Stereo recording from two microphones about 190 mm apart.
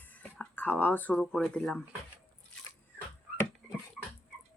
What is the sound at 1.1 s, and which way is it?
Speech, centre (ahead or behind).